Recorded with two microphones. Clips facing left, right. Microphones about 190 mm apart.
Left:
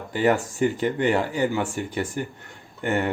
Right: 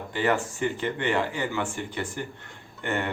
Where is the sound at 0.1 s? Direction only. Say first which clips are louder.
Left 4 dB; 40° left (ahead or behind).